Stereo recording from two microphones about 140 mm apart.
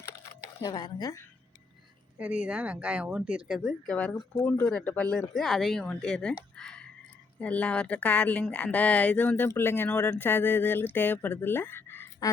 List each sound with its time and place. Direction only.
0.6 s a woman's voice: 30° left (ahead or behind)
2.1 s a woman's voice: 10° right (ahead or behind); by 6.3 s 5° left (ahead or behind)
6.6 s a sound: 5° left (ahead or behind)
7.3 s a woman's voice: 10° left (ahead or behind)